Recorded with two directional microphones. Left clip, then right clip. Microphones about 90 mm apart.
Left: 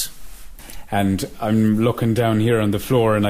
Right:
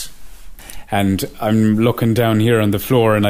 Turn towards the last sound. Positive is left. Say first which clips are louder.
# right 3 dB
turn(degrees=-40)  # may be behind; listen again after turning